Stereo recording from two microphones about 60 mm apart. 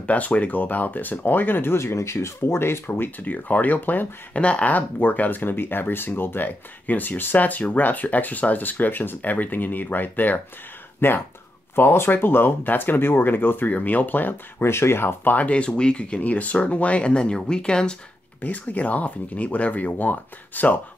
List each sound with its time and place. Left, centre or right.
0.0 s speech: left
3.2 s speech: left
4.4 s speech: centre
14.6 s speech: left
15.3 s speech: left
18.4 s speech: left